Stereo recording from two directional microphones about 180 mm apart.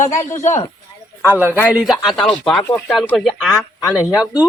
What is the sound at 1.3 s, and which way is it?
Speech, 10° right (ahead or behind).